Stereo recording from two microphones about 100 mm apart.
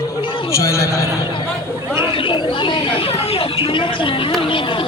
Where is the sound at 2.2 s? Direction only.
55° left (ahead or behind).